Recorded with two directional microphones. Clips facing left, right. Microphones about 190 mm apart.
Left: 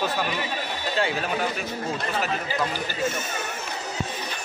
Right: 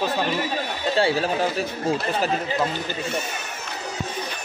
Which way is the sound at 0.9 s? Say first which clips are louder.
Right 5 dB; 35° right (ahead or behind).